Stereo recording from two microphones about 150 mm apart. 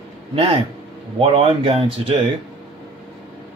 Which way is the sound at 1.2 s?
35° right (ahead or behind).